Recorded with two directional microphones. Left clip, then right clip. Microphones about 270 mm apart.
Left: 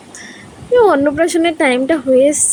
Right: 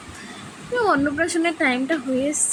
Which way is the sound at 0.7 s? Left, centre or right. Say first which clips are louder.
Left 9 dB; centre.